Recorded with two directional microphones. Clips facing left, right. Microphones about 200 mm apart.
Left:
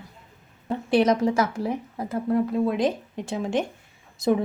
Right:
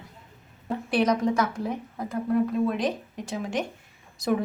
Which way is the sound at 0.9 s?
25° left (ahead or behind).